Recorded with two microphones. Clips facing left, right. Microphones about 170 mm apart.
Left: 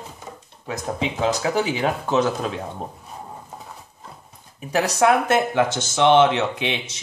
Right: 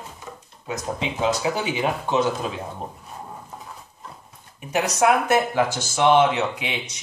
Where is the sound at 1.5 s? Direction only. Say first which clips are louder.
Left 2 dB; 35° left (ahead or behind).